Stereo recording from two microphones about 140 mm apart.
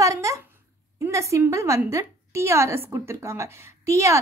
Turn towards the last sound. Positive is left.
turn(degrees=-20)  # may be behind; listen again after turning